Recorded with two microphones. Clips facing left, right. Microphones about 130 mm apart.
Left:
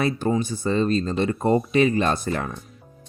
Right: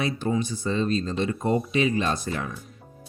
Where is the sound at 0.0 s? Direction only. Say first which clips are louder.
Left 3 dB; 50° left (ahead or behind).